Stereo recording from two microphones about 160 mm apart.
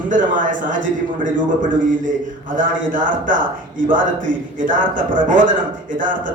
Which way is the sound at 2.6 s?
55° right (ahead or behind).